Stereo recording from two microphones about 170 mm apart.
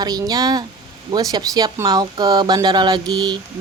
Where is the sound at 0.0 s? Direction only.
25° right (ahead or behind).